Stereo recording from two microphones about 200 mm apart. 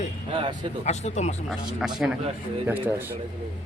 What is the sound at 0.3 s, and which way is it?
Speech, 25° right (ahead or behind).